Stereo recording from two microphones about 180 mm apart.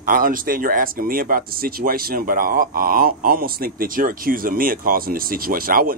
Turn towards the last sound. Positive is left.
turn(degrees=-50)  # may be behind; listen again after turning